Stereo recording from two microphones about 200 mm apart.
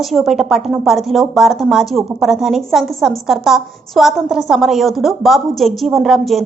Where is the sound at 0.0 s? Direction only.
Centre (ahead or behind).